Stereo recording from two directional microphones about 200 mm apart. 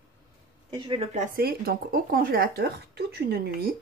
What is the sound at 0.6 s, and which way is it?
Speech, 30° right (ahead or behind).